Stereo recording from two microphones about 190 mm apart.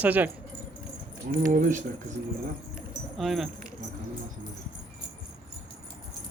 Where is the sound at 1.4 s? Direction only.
45° right (ahead or behind).